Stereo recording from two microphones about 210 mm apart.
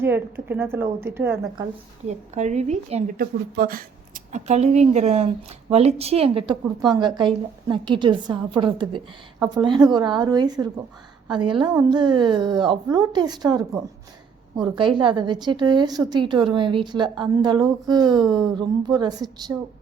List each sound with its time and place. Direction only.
0.0 s a woman's voice: 10° right (ahead or behind)
2.0 s a woman's voice: 35° right (ahead or behind)
3.2 s speech: 45° right (ahead or behind); by 19.5 s 20° right (ahead or behind)